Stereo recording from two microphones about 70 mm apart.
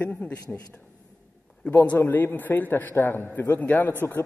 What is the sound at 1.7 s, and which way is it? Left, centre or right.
A man's voice, left.